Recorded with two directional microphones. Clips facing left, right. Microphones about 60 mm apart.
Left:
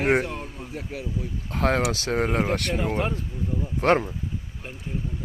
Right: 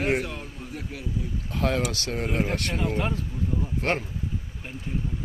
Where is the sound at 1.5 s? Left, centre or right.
Left.